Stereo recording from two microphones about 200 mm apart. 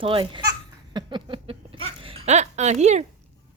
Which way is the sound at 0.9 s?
25° right (ahead or behind).